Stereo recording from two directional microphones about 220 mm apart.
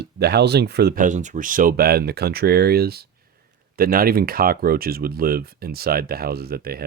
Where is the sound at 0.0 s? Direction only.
50° right (ahead or behind).